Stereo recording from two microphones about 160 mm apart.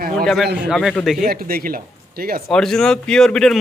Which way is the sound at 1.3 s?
65° right (ahead or behind).